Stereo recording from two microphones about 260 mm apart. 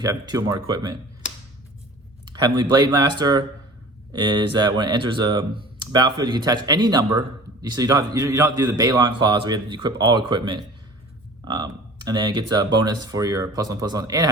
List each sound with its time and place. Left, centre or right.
0.0 s speech: centre
2.2 s speech: centre